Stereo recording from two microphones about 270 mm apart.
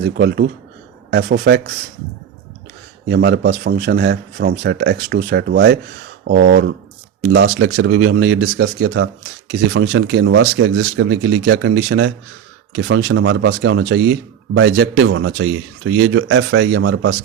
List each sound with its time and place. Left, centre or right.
0.0 s speech: right
3.1 s speech: right
7.3 s speech: right